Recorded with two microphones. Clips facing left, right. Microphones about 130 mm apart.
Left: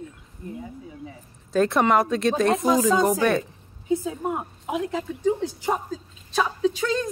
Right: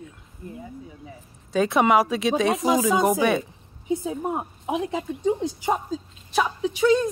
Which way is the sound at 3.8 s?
20° right (ahead or behind).